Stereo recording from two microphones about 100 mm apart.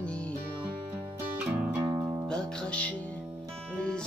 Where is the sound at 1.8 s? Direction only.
30° right (ahead or behind).